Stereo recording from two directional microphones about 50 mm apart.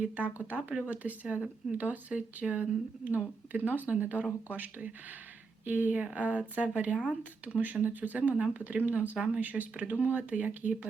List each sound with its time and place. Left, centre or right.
0.3 s speech: right
6.9 s speech: centre
7.4 s speech: right
9.1 s speech: centre
9.4 s speech: right